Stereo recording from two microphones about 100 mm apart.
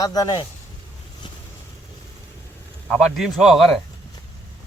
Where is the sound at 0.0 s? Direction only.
40° left (ahead or behind).